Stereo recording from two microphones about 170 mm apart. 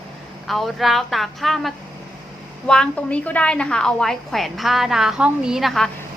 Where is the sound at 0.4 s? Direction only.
Centre (ahead or behind).